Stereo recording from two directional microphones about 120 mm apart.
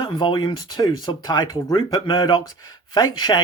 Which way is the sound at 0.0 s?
40° left (ahead or behind).